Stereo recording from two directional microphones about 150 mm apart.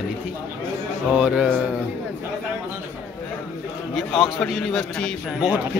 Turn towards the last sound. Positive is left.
turn(degrees=5)  # may be behind; listen again after turning